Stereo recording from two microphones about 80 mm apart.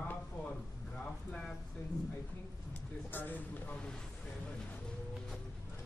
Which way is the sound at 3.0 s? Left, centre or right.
Left.